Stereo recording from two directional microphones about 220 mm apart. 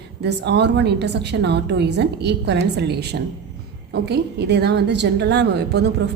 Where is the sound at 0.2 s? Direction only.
50° right (ahead or behind).